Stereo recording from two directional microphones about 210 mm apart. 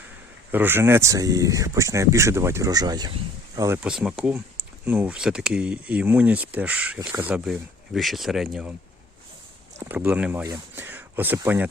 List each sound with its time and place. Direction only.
0.5 s speech: 10° right (ahead or behind)
3.8 s speech: 5° right (ahead or behind)
9.7 s speech: 10° right (ahead or behind)